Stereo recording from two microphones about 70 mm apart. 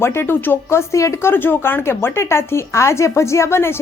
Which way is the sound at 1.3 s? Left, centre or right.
Left.